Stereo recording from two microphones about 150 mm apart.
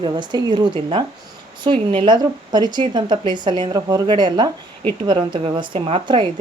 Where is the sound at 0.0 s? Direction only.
30° right (ahead or behind).